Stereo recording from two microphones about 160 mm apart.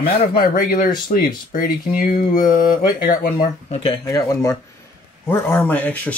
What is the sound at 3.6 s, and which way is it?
Speech, 35° left (ahead or behind).